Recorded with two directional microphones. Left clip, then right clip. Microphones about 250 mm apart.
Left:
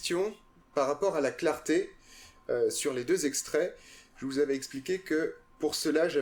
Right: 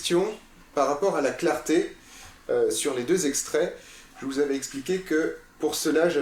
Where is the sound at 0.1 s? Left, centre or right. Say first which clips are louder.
Right 8 dB; left.